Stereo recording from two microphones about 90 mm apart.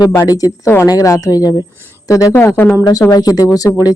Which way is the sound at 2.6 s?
25° left (ahead or behind).